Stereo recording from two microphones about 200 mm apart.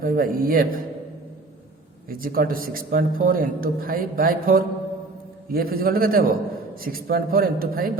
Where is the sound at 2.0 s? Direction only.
45° right (ahead or behind).